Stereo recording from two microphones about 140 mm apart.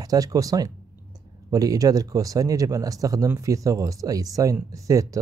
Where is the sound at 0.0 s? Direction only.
25° right (ahead or behind).